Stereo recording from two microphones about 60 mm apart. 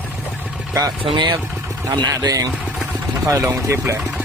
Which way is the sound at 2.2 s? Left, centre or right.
Right.